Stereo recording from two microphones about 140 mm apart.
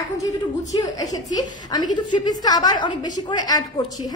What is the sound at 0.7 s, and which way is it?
A woman's voice, 30° left (ahead or behind).